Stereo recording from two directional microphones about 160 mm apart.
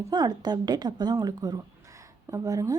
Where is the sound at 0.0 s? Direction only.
25° right (ahead or behind).